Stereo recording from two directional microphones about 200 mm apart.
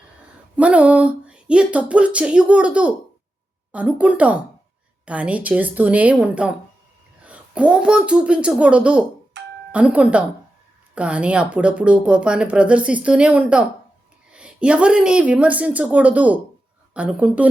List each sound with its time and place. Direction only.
0.5 s a woman's voice: 5° right (ahead or behind)
9.4 s doorbell: 60° right (ahead or behind)
9.7 s a woman's voice: 5° right (ahead or behind)